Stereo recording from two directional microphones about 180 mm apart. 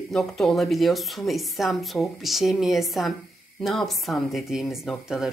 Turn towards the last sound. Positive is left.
turn(degrees=0)  # may be behind; listen again after turning